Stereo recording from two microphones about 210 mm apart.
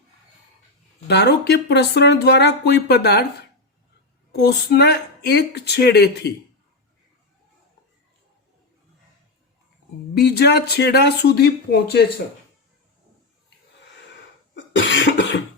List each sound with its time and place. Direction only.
1.0 s speech: 50° left (ahead or behind)
4.4 s speech: 50° left (ahead or behind)
10.2 s speech: 50° left (ahead or behind)
14.5 s cough: 60° left (ahead or behind)